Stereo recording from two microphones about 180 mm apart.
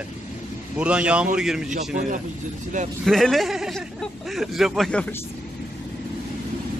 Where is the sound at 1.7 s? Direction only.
45° right (ahead or behind).